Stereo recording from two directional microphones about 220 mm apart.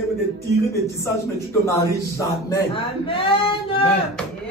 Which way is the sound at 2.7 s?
25° left (ahead or behind).